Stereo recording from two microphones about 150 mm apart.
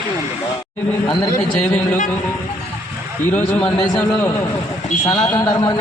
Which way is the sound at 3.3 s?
10° left (ahead or behind).